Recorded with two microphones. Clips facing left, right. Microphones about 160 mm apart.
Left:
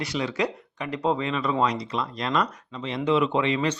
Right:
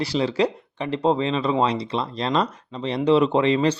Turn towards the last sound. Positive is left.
turn(degrees=-35)  # may be behind; listen again after turning